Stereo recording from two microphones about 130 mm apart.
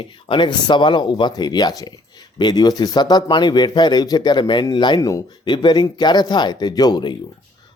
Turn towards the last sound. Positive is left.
turn(degrees=35)  # may be behind; listen again after turning